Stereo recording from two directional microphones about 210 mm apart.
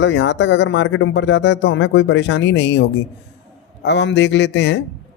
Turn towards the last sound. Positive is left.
turn(degrees=55)  # may be behind; listen again after turning